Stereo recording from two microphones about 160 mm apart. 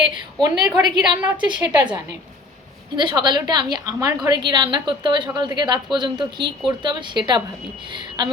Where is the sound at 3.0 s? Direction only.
30° right (ahead or behind).